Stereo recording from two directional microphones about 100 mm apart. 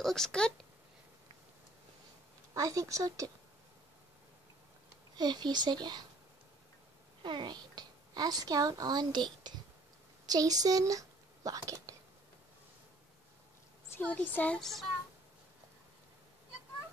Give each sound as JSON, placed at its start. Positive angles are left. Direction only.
{"t": 0.0, "sound": "speech", "side_deg": 5}
{"t": 2.5, "sound": "speech", "side_deg": -35}
{"t": 5.1, "sound": "speech", "side_deg": -45}
{"t": 7.2, "sound": "a woman's voice", "side_deg": -50}
{"t": 13.9, "sound": "speech", "side_deg": 15}